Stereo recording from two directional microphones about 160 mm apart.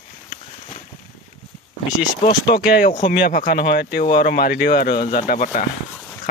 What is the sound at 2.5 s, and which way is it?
Speech, 75° left (ahead or behind).